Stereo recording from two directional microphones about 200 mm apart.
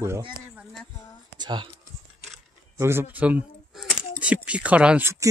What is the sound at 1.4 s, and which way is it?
Computer keyboard, 20° right (ahead or behind).